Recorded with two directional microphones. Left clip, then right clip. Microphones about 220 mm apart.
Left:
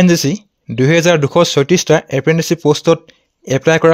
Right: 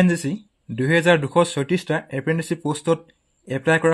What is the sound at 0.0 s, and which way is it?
Speech, 45° left (ahead or behind).